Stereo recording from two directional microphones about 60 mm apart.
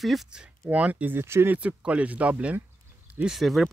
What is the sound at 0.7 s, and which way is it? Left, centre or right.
Speech, right.